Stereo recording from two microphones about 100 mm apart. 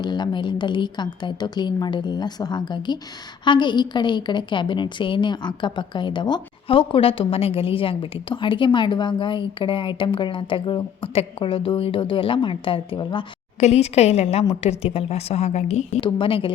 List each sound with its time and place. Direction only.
0.0 s a woman's voice: 45° left (ahead or behind)
11.0 s a woman's voice: 75° left (ahead or behind); by 13.2 s 55° left (ahead or behind)
13.6 s a woman's voice: 90° left
16.0 s a woman's voice: 60° left (ahead or behind)